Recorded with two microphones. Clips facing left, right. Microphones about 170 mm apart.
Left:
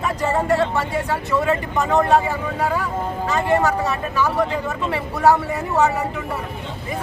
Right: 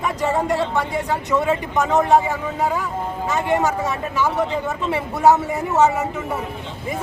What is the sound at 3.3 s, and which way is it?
A man's voice, 20° right (ahead or behind).